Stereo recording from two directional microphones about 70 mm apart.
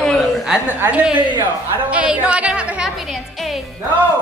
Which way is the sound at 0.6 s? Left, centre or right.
Right.